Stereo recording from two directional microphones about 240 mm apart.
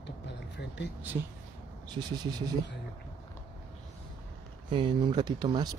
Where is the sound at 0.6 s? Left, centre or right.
Left.